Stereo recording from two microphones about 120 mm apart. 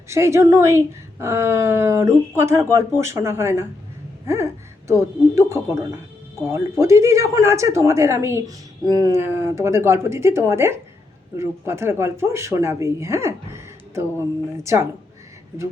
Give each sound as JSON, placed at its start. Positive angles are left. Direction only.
{"t": 0.1, "sound": "speech", "side_deg": -25}